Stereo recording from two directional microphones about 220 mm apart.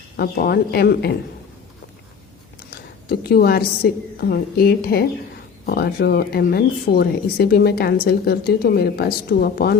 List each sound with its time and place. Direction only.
0.2 s speech: 45° left (ahead or behind)
3.1 s speech: 45° left (ahead or behind)